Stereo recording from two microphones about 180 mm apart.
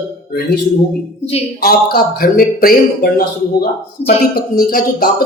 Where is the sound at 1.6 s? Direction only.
60° left (ahead or behind).